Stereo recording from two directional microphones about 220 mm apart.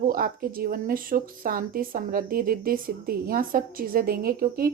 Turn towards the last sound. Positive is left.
turn(degrees=-40)  # may be behind; listen again after turning